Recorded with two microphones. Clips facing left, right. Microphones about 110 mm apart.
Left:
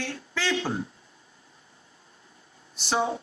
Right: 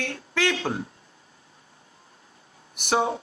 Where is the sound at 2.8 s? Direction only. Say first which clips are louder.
Right 3 dB; 55° right (ahead or behind).